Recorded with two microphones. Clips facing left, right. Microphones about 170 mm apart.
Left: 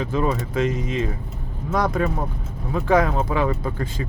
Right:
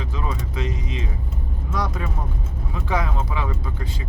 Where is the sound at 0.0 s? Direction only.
50° left (ahead or behind).